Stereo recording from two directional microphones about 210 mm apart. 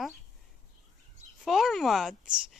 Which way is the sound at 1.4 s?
Centre (ahead or behind).